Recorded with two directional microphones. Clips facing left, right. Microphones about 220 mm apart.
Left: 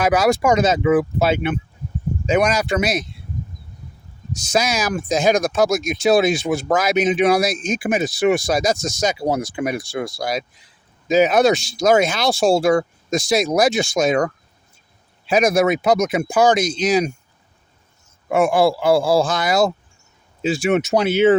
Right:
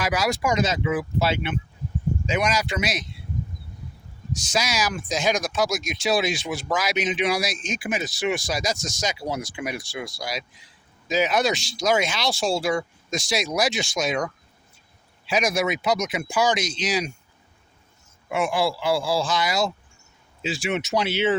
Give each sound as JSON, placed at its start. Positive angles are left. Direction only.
{"t": 0.2, "sound": "speech", "side_deg": 55}
{"t": 4.7, "sound": "speech", "side_deg": 55}
{"t": 18.3, "sound": "speech", "side_deg": 50}